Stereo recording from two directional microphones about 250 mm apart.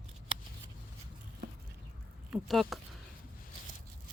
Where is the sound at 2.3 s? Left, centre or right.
Centre.